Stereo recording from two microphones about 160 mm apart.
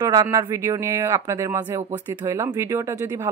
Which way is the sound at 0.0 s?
25° right (ahead or behind).